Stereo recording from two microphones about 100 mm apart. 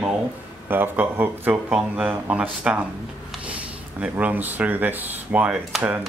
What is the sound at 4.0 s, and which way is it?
Speech, 15° right (ahead or behind).